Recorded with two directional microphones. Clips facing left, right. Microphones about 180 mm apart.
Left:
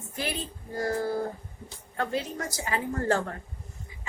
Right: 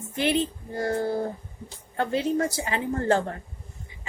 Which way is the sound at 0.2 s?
25° right (ahead or behind).